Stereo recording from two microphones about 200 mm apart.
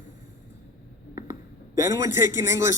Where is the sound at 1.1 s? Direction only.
15° right (ahead or behind).